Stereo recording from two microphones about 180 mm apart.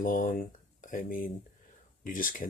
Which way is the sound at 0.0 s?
45° left (ahead or behind).